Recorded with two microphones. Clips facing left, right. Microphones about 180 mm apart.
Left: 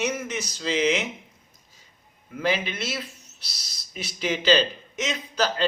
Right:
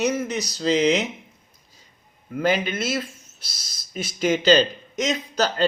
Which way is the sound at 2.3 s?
45° right (ahead or behind).